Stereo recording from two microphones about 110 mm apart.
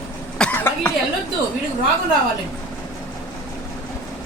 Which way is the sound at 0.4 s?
10° left (ahead or behind).